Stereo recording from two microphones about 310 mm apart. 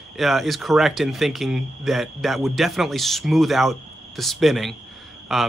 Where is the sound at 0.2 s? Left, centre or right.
Centre.